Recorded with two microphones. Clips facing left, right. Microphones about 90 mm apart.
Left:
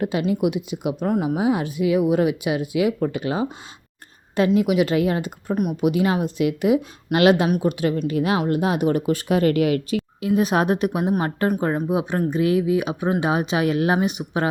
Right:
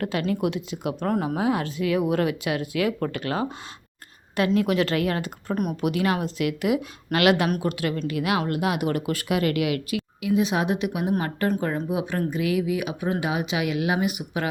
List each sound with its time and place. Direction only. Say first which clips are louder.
0.0 s speech: left 4 dB; 20° left (ahead or behind)
0.9 s speech: left 3 dB; 5° left (ahead or behind)
1.4 s a woman's voice: left 3 dB; 20° left (ahead or behind)
4.6 s speech: left 4 dB; 15° left (ahead or behind)
5.5 s speech: left 3 dB; 5° left (ahead or behind)
5.8 s speech: left 4 dB; 20° left (ahead or behind); by 11.1 s 40° left (ahead or behind)
11.2 s speech: left 3 dB; 25° left (ahead or behind)